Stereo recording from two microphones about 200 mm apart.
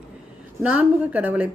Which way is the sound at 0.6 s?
10° right (ahead or behind).